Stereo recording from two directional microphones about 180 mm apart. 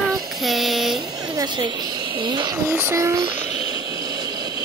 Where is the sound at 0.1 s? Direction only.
Centre (ahead or behind).